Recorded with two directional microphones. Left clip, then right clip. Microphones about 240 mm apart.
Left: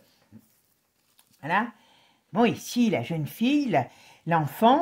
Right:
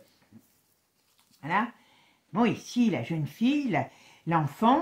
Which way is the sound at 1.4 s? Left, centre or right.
Left.